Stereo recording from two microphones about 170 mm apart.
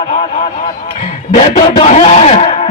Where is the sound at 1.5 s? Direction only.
35° left (ahead or behind).